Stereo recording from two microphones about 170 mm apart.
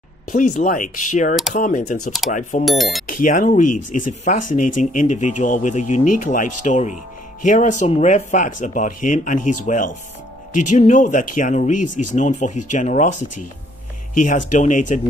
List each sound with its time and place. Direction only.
0.3 s speech: 50° left (ahead or behind)
2.6 s speech: centre (ahead or behind)
3.1 s speech: 50° left (ahead or behind)
14.1 s speech: 50° left (ahead or behind)